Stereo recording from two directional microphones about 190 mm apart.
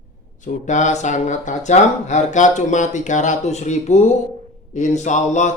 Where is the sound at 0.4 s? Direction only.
40° left (ahead or behind).